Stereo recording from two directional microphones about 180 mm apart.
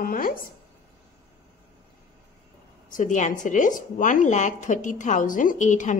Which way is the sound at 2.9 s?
45° left (ahead or behind).